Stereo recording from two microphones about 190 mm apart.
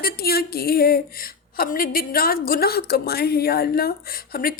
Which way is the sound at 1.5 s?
50° left (ahead or behind).